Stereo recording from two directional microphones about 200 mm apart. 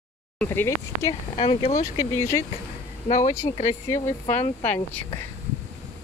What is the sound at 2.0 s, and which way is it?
Speech, 15° left (ahead or behind).